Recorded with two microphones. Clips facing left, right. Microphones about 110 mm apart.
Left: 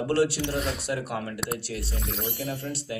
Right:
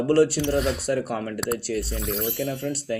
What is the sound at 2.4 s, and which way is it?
Speech, 50° right (ahead or behind).